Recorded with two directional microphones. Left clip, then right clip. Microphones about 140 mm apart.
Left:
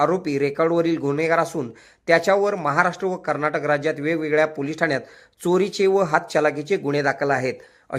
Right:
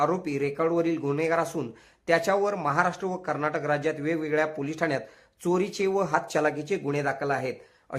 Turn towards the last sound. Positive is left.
turn(degrees=30)  # may be behind; listen again after turning